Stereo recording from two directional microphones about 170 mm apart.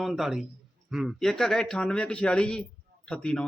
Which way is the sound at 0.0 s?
Centre (ahead or behind).